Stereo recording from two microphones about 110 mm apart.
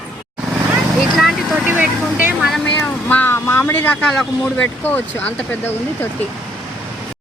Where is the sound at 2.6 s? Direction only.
15° left (ahead or behind).